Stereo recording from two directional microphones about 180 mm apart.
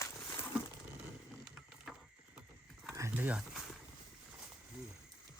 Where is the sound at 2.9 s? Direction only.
15° right (ahead or behind).